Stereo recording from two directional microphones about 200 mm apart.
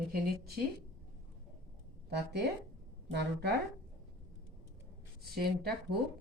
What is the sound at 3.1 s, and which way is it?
Speech, 55° right (ahead or behind).